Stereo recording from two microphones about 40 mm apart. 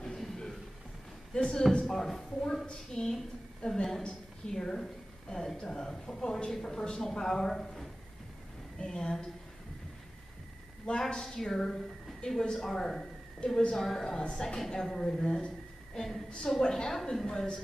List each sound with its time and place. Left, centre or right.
0.0 s a sound: centre
1.3 s a man's voice: centre
2.6 s a man's voice: centre
10.9 s a woman's voice: left
11.2 s a man's voice: centre
13.4 s a woman's voice: left
13.7 s a man's voice: centre